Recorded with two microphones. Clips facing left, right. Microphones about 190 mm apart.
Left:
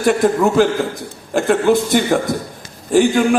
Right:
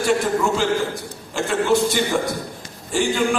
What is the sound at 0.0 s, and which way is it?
A man's voice, 55° left (ahead or behind).